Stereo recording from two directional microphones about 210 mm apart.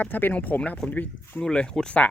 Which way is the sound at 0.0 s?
10° left (ahead or behind).